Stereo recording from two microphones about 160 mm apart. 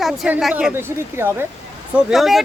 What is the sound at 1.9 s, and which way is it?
Speech, centre (ahead or behind).